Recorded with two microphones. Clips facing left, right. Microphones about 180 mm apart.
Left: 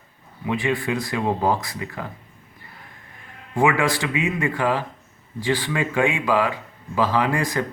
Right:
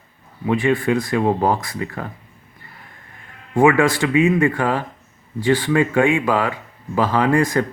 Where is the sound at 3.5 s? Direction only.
50° right (ahead or behind).